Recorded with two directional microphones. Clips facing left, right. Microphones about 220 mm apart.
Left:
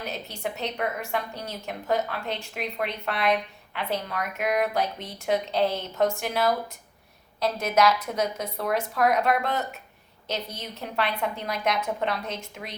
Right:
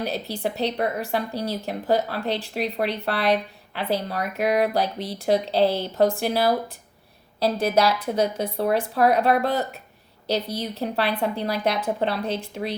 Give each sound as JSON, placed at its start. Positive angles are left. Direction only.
{"t": 0.0, "sound": "a woman's voice", "side_deg": -35}